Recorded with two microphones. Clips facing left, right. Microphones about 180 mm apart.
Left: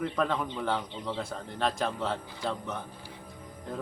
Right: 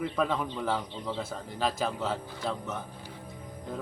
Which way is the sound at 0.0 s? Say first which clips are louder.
Even; 5° right (ahead or behind).